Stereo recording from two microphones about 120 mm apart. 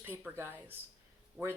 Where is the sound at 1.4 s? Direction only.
5° right (ahead or behind).